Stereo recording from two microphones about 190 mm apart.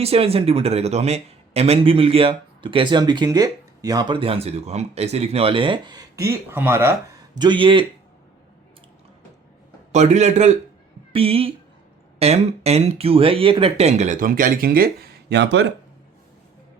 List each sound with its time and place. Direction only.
0.0 s speech: 30° right (ahead or behind)
9.9 s speech: 35° right (ahead or behind); by 15.6 s 65° right (ahead or behind)